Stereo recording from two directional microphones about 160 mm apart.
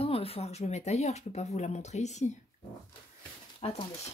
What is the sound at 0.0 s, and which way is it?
Speech, 40° left (ahead or behind).